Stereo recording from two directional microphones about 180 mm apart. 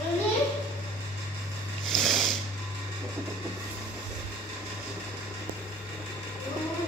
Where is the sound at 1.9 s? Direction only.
Centre (ahead or behind).